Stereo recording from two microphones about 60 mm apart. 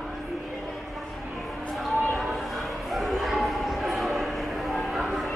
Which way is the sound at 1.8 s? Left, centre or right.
Centre.